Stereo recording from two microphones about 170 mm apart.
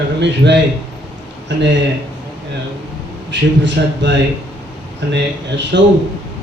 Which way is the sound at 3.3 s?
90° right.